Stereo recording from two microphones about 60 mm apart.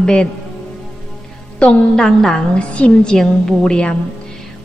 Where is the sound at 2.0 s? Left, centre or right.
Centre.